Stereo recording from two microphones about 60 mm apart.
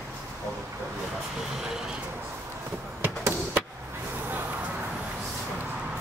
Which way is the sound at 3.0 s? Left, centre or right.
Right.